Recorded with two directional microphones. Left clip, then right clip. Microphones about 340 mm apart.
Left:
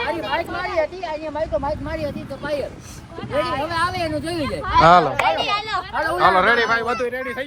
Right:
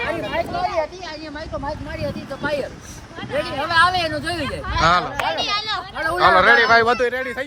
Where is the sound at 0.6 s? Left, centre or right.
Left.